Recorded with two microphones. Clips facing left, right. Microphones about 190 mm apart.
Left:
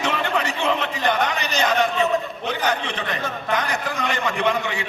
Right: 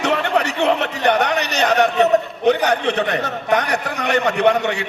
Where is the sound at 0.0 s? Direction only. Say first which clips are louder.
Right 5 dB; 70° right (ahead or behind).